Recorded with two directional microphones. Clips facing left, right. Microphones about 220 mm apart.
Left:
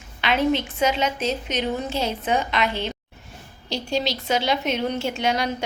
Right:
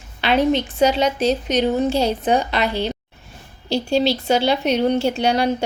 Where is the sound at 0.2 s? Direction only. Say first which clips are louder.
Right 4 dB; 35° right (ahead or behind).